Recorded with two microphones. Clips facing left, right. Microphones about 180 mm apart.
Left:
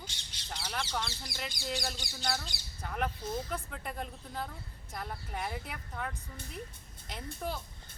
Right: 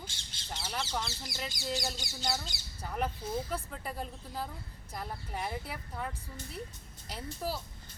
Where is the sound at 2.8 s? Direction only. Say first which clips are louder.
Even; 5° right (ahead or behind).